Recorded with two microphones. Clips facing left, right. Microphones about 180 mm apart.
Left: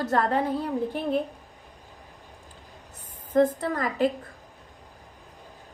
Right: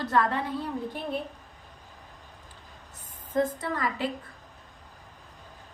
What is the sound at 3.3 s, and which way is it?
Speech, 45° left (ahead or behind).